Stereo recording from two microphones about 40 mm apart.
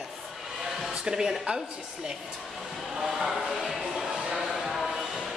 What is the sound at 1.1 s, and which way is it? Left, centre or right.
Speech, centre.